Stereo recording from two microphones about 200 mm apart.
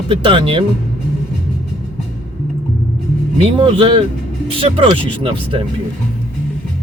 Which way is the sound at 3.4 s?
25° right (ahead or behind).